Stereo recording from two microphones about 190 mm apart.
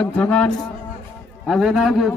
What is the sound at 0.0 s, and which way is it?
A man's voice, 5° left (ahead or behind).